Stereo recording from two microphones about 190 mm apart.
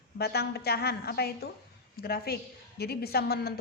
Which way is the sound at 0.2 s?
55° left (ahead or behind).